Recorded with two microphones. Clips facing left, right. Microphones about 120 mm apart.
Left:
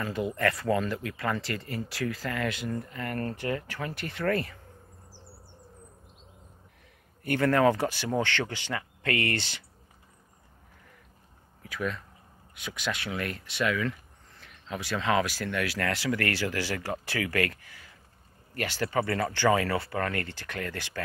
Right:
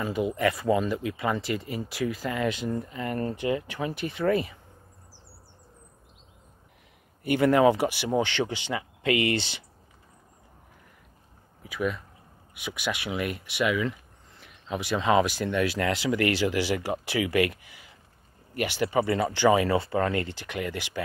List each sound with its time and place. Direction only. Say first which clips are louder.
0.0 s speech: right 3 dB; 15° right (ahead or behind)
7.2 s speech: right 3 dB; 15° right (ahead or behind)
11.6 s speech: right 4 dB; 15° right (ahead or behind)